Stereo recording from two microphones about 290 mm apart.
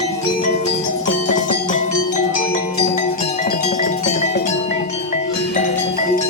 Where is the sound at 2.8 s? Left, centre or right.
Left.